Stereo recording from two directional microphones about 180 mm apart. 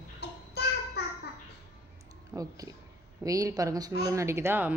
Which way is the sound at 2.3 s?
20° right (ahead or behind).